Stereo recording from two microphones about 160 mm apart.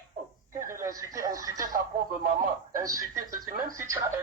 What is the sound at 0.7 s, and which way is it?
Speech, 20° right (ahead or behind).